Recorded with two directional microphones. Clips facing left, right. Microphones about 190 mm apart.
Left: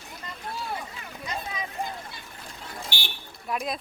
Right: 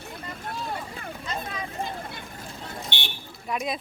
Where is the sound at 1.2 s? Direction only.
15° left (ahead or behind).